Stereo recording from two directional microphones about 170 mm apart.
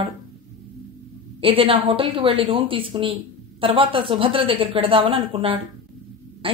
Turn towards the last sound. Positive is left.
turn(degrees=-35)  # may be behind; listen again after turning